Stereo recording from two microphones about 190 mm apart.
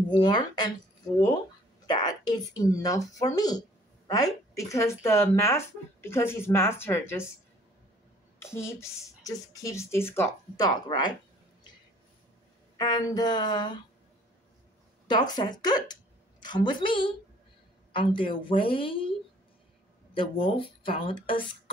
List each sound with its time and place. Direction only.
0.1 s speech: 20° left (ahead or behind)
1.9 s a woman's voice: 20° left (ahead or behind)
8.4 s speech: 15° left (ahead or behind)
12.7 s speech: 20° left (ahead or behind)
15.0 s a woman's voice: 20° left (ahead or behind)
20.2 s speech: 30° left (ahead or behind)